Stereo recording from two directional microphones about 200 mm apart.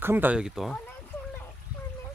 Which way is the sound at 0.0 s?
10° right (ahead or behind).